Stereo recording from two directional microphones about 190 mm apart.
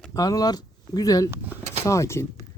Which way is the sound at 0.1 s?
20° left (ahead or behind).